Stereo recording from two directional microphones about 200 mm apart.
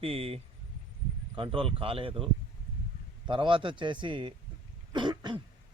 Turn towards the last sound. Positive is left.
turn(degrees=-20)  # may be behind; listen again after turning